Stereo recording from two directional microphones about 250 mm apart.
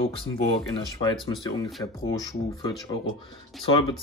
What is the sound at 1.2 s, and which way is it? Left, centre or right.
Speech, centre.